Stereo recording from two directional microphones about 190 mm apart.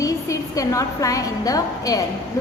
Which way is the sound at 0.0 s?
15° left (ahead or behind).